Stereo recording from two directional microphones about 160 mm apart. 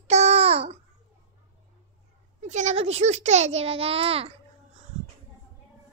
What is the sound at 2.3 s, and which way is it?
A child's voice, 45° right (ahead or behind).